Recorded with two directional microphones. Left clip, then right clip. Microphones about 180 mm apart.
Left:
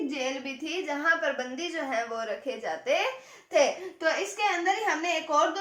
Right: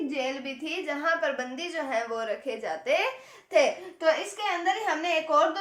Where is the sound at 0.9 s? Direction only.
35° right (ahead or behind).